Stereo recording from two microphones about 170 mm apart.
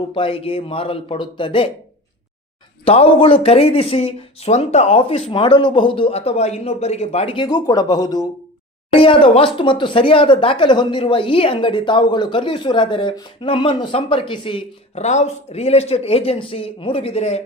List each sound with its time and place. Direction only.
0.1 s speech: 30° left (ahead or behind)
2.8 s speech: 35° left (ahead or behind)